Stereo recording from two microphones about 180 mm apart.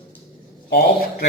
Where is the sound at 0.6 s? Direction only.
60° left (ahead or behind).